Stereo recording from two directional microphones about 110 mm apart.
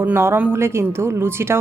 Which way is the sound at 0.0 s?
20° right (ahead or behind).